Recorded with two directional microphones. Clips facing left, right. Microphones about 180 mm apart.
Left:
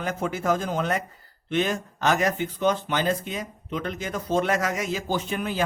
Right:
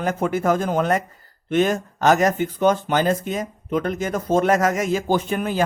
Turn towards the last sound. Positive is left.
turn(degrees=-45)  # may be behind; listen again after turning